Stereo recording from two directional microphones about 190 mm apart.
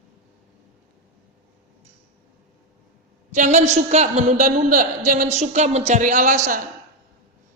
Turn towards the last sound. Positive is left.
turn(degrees=-40)  # may be behind; listen again after turning